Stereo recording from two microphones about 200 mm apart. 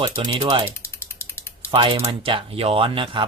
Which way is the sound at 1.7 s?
25° right (ahead or behind).